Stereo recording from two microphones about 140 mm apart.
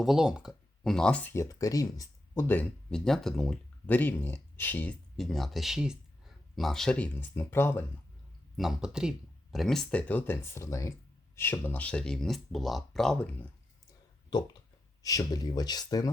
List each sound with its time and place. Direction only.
0.0 s speech: 5° right (ahead or behind); by 7.9 s 15° left (ahead or behind)
8.5 s speech: 5° right (ahead or behind)
15.0 s speech: 25° left (ahead or behind)